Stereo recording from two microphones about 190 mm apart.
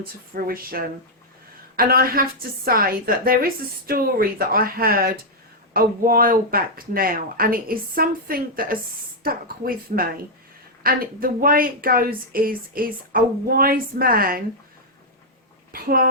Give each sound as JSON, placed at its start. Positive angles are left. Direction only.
{"t": 0.0, "sound": "speech", "side_deg": -50}
{"t": 15.7, "sound": "speech", "side_deg": -50}